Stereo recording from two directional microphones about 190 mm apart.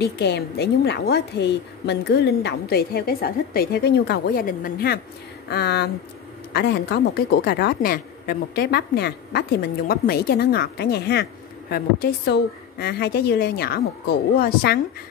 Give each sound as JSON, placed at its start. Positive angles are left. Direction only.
{"t": 0.0, "sound": "a woman's voice", "side_deg": 60}